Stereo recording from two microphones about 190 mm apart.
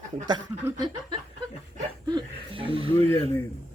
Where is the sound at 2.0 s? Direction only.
25° right (ahead or behind).